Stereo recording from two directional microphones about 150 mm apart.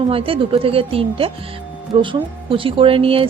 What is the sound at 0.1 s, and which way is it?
Speech, 35° right (ahead or behind).